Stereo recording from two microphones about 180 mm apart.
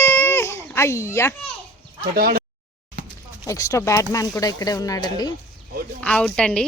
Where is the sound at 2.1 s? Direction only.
55° right (ahead or behind).